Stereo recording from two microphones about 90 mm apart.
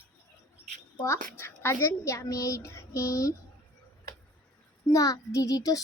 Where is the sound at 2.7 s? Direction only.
35° left (ahead or behind).